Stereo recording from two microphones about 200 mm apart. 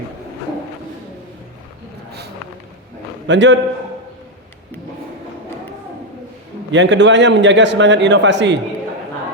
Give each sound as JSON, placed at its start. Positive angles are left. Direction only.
{"t": 3.2, "sound": "a man's voice", "side_deg": -65}
{"t": 6.7, "sound": "a man's voice", "side_deg": -65}